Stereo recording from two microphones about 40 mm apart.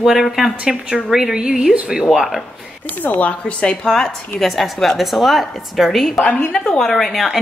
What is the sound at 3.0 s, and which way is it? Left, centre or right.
Speech, left.